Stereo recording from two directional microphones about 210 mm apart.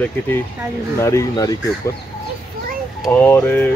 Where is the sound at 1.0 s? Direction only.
15° left (ahead or behind).